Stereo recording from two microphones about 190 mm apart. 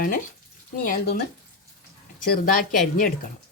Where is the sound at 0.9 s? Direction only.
55° left (ahead or behind).